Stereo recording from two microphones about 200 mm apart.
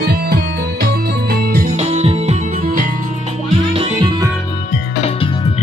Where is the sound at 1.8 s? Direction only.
35° right (ahead or behind).